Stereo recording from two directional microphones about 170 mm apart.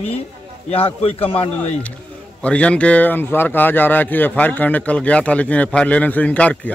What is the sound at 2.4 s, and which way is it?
Speech, 5° left (ahead or behind).